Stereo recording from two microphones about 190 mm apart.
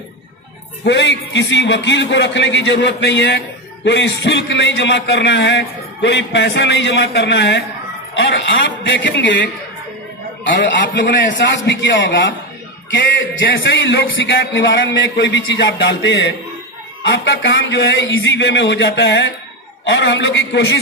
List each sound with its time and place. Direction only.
0.8 s a man's voice: 65° left (ahead or behind)
11.1 s a man's voice: 70° left (ahead or behind)